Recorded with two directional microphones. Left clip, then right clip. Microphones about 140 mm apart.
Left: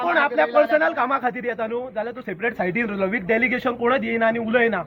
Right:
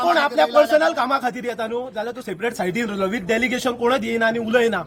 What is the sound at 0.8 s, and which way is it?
Speech, 20° right (ahead or behind).